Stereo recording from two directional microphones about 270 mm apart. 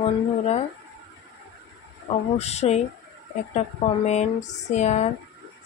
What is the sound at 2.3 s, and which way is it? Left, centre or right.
A woman's voice, left.